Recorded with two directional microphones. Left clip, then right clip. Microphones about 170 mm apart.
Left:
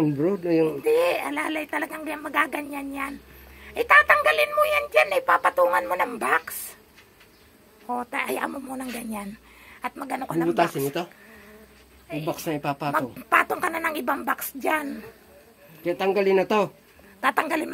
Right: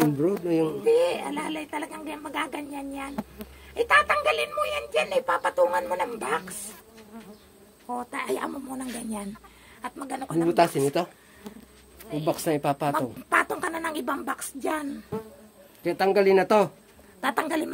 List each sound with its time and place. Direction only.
0.2 s speech: centre (ahead or behind)
7.9 s speech: 15° right (ahead or behind)
9.8 s speech: 5° right (ahead or behind)
10.5 s speech: 20° right (ahead or behind)
12.1 s speech: 15° right (ahead or behind)
13.3 s a woman's voice: 10° right (ahead or behind)
15.8 s speech: 25° right (ahead or behind)